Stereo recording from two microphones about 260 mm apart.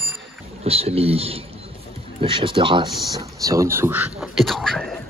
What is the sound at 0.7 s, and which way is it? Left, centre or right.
Speech, right.